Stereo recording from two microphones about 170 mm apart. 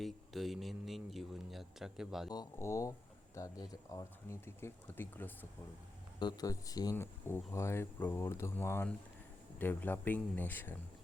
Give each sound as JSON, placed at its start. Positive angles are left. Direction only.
{"t": 0.0, "sound": "a man's voice", "side_deg": 0}
{"t": 2.3, "sound": "speech", "side_deg": 20}
{"t": 6.1, "sound": "speech", "side_deg": 25}